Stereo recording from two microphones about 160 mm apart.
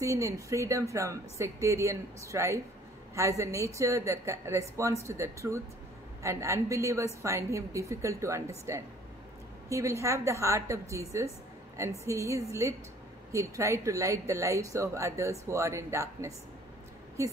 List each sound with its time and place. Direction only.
0.0 s a woman's voice: 20° right (ahead or behind)